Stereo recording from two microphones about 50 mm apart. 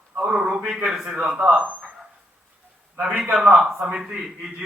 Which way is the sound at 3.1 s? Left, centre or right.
Right.